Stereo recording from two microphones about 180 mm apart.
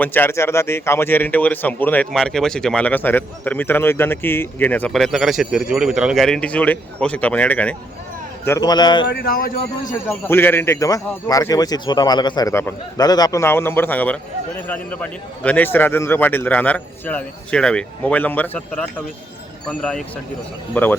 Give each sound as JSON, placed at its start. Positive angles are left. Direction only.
{"t": 0.0, "sound": "a man's voice", "side_deg": 10}
{"t": 8.4, "sound": "speech", "side_deg": 20}
{"t": 9.0, "sound": "speech", "side_deg": 60}
{"t": 10.1, "sound": "a man's voice", "side_deg": 10}